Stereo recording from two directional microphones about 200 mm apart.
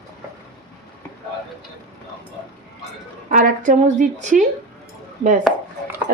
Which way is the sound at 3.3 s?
40° right (ahead or behind).